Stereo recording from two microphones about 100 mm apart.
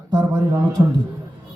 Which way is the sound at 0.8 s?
40° right (ahead or behind).